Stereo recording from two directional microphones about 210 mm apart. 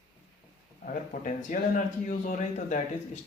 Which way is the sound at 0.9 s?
40° left (ahead or behind).